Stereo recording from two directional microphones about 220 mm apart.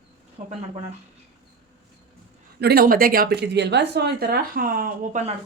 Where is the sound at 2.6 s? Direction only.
45° right (ahead or behind).